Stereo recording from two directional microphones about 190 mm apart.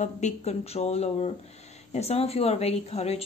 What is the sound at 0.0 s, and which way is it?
Speech, 35° left (ahead or behind).